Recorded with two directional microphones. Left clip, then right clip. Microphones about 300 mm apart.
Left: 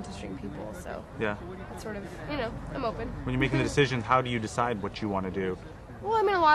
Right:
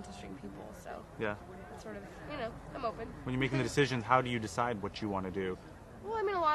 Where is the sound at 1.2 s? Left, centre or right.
Centre.